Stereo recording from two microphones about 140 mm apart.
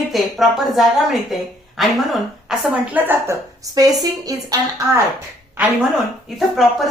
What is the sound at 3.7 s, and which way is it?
Speech, 25° right (ahead or behind).